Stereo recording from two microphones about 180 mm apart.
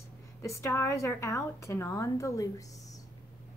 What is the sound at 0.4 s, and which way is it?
A woman's voice, 15° left (ahead or behind).